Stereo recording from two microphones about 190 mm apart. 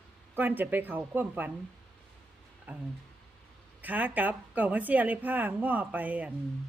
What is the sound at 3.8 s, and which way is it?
A woman's voice, 10° right (ahead or behind).